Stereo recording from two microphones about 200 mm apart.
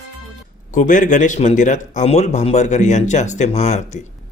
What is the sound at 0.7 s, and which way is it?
Speech, 40° left (ahead or behind).